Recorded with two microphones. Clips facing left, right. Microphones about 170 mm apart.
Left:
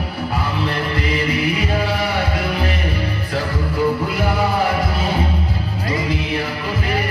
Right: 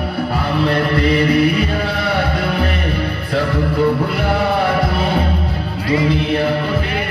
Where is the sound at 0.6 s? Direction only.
65° right (ahead or behind).